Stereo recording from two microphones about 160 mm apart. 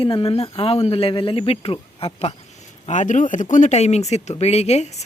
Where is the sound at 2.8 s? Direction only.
50° left (ahead or behind).